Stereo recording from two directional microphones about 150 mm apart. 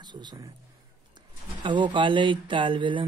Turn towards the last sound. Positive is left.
turn(degrees=-35)  # may be behind; listen again after turning